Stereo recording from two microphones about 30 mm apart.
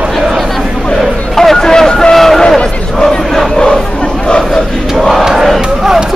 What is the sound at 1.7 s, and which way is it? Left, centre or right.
Vehicle, left.